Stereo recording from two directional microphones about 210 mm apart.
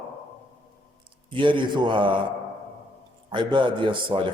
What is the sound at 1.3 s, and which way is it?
Speech, 25° right (ahead or behind).